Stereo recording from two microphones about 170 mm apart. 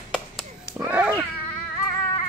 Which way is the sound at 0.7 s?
10° right (ahead or behind).